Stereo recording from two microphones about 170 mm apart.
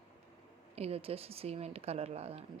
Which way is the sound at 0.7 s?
35° right (ahead or behind).